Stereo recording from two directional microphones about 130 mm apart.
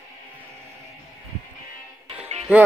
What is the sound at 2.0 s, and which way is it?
Music, 55° right (ahead or behind).